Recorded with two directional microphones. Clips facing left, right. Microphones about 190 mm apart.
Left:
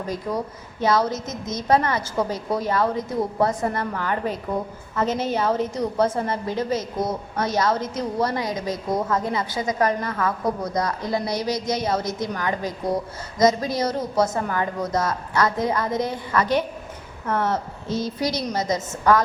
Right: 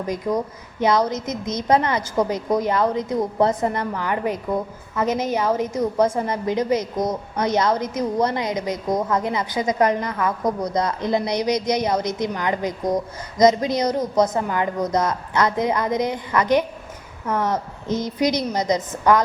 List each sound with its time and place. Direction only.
0.8 s a woman's voice: 20° right (ahead or behind)